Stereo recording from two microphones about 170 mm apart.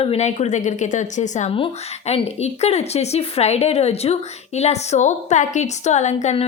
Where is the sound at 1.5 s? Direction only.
35° left (ahead or behind).